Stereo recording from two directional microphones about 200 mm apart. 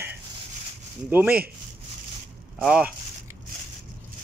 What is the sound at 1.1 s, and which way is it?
Speech, 10° right (ahead or behind).